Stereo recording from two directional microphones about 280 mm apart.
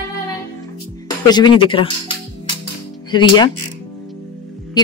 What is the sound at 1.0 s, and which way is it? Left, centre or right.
Speech, centre.